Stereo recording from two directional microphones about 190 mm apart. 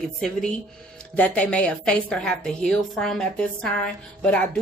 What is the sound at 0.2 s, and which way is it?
Speech, 5° left (ahead or behind).